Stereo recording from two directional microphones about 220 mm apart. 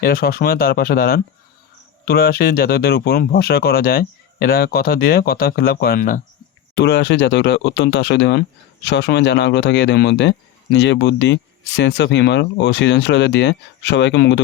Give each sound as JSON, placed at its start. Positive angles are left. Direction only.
{"t": 0.0, "sound": "speech", "side_deg": 45}
{"t": 6.7, "sound": "speech", "side_deg": 50}